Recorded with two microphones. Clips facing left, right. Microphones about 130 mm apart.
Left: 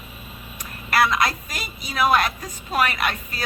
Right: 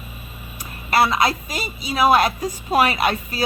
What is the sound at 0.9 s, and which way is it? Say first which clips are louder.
A woman's voice: right 2 dB; 30° right (ahead or behind).